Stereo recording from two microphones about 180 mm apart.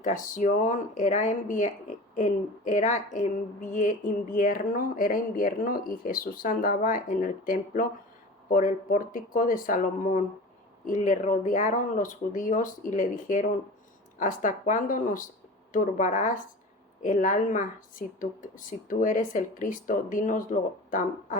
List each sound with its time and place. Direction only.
0.0 s speech: 45° left (ahead or behind)